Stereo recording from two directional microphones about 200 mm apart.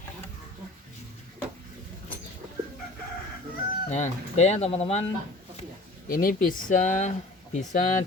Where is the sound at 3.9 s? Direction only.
35° left (ahead or behind).